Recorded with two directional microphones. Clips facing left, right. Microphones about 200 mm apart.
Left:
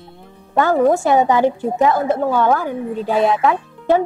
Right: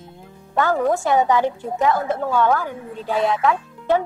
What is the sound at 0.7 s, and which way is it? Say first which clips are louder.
Speech: left 7 dB; 25° left (ahead or behind).